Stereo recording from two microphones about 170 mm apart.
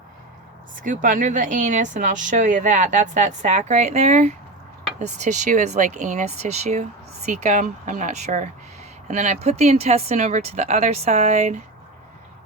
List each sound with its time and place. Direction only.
0.8 s a woman's voice: 50° right (ahead or behind)